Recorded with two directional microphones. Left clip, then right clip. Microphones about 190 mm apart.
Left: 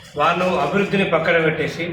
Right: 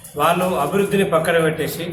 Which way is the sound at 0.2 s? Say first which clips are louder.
Even; 30° right (ahead or behind).